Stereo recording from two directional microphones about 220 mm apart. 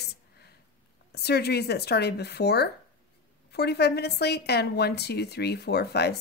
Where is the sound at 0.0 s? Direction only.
45° left (ahead or behind).